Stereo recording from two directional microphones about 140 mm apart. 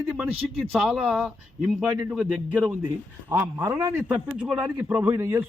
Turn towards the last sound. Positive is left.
turn(degrees=-20)  # may be behind; listen again after turning